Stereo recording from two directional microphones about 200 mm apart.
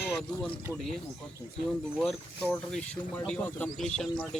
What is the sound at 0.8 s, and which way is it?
Speech, centre (ahead or behind).